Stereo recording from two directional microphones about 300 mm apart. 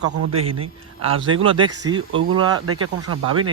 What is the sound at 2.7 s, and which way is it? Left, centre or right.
Speech, right.